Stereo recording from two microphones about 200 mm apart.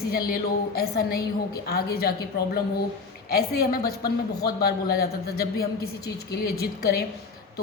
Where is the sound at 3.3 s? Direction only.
50° left (ahead or behind).